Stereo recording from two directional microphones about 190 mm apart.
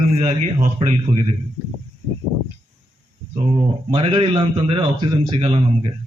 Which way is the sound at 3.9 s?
30° right (ahead or behind).